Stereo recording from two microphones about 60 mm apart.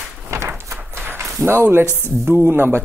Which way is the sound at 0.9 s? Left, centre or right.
Right.